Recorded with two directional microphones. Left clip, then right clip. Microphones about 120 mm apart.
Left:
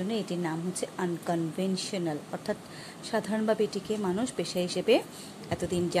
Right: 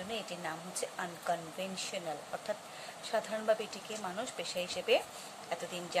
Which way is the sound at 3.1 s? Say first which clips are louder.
Left 3 dB; 50° left (ahead or behind).